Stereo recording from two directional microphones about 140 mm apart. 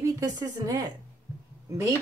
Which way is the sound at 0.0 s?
25° right (ahead or behind).